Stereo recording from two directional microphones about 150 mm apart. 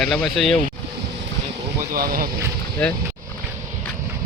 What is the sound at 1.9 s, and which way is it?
Speech, 75° right (ahead or behind).